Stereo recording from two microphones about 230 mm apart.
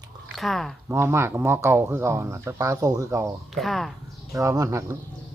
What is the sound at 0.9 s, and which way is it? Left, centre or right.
Speech, centre.